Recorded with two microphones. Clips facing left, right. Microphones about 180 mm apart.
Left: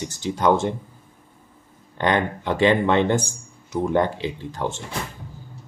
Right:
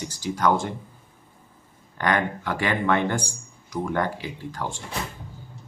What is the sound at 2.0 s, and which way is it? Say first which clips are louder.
Speech: left 3 dB; 20° left (ahead or behind).